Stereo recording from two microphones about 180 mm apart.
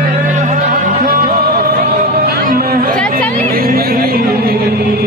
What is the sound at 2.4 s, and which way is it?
Chatter, 55° right (ahead or behind).